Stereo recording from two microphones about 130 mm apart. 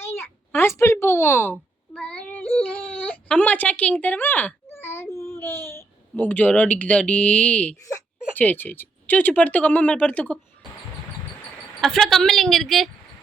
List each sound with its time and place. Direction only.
0.0 s a child's voice: 20° left (ahead or behind)
1.9 s baby cry: 10° left (ahead or behind)
5.1 s speech: 20° left (ahead or behind)
11.8 s a woman's voice: centre (ahead or behind)